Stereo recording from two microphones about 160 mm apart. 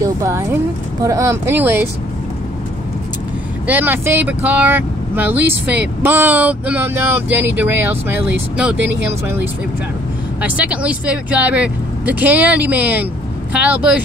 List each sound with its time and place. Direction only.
0.0 s speech: 20° right (ahead or behind)
3.6 s speech: 10° right (ahead or behind)
10.4 s speech: 10° right (ahead or behind)